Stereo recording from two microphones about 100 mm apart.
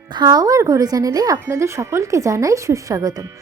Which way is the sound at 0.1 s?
45° right (ahead or behind).